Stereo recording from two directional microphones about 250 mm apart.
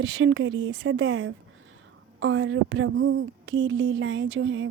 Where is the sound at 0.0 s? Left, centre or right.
Right.